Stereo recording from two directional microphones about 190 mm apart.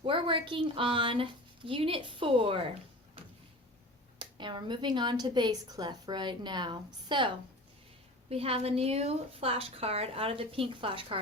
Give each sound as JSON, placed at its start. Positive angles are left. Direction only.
{"t": 0.0, "sound": "a woman's voice", "side_deg": -25}
{"t": 4.2, "sound": "a woman's voice", "side_deg": -25}
{"t": 8.3, "sound": "a woman's voice", "side_deg": -30}